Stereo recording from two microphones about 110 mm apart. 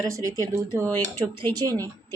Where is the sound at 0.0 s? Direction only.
30° right (ahead or behind).